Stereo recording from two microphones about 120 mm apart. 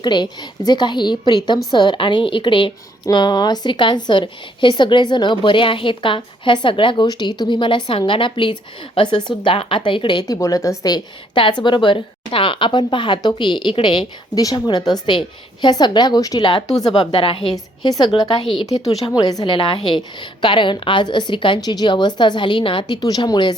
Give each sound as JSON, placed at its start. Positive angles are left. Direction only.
{"t": 0.0, "sound": "a woman's voice", "side_deg": 40}
{"t": 10.3, "sound": "a woman's voice", "side_deg": 25}
{"t": 17.5, "sound": "a woman's voice", "side_deg": 30}
{"t": 18.6, "sound": "a woman's voice", "side_deg": 30}
{"t": 19.5, "sound": "a woman's voice", "side_deg": 45}